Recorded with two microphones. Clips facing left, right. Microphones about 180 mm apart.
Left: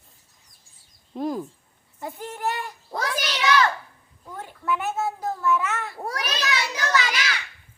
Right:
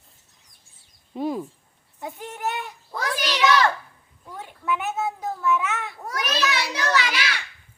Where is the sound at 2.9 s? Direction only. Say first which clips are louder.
Left 2 dB; 40° left (ahead or behind).